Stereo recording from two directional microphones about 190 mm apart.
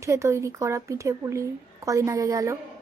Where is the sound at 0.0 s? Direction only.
15° right (ahead or behind).